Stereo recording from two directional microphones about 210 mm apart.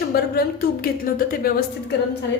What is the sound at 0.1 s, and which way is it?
A woman's voice, 45° left (ahead or behind).